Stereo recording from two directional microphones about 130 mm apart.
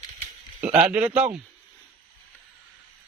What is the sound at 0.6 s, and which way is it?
Speech, 10° right (ahead or behind).